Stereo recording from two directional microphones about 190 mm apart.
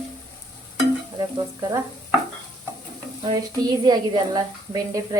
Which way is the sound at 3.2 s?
20° right (ahead or behind).